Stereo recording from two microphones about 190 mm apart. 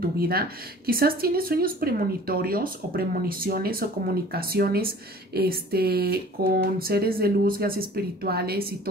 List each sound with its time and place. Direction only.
0.2 s speech: 50° right (ahead or behind)